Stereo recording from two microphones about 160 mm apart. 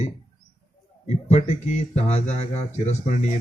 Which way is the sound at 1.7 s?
45° left (ahead or behind).